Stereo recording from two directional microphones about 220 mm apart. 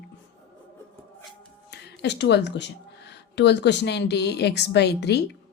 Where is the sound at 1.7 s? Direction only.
50° left (ahead or behind).